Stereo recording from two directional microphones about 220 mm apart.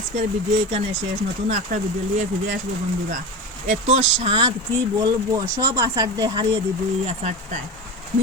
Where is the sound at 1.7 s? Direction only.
40° right (ahead or behind).